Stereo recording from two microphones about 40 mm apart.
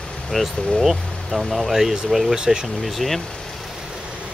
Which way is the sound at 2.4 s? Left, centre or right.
Centre.